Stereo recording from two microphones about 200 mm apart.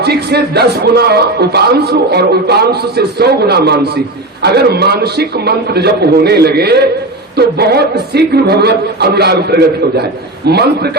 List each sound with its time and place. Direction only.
0.0 s speech: 55° right (ahead or behind)